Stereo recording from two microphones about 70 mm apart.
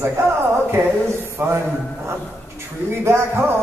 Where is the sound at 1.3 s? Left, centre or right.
Right.